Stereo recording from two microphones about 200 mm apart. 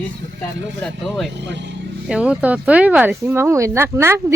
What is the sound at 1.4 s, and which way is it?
Speech, 60° right (ahead or behind).